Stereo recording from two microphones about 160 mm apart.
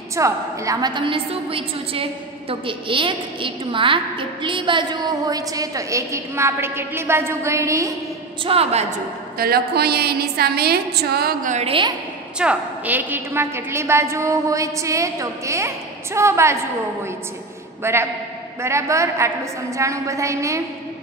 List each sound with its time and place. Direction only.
0.1 s a woman's voice: 20° right (ahead or behind)
8.5 s a woman's voice: 40° right (ahead or behind)
9.4 s a woman's voice: 75° right (ahead or behind)
11.4 s a woman's voice: 45° right (ahead or behind)
12.4 s a woman's voice: 10° right (ahead or behind)
17.8 s a woman's voice: 15° right (ahead or behind)